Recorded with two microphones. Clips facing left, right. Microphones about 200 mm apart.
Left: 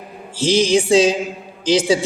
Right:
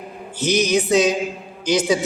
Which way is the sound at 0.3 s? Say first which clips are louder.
Left 3 dB; 30° left (ahead or behind).